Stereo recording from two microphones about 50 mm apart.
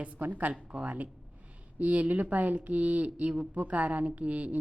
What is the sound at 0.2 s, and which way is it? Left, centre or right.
A woman's voice, right.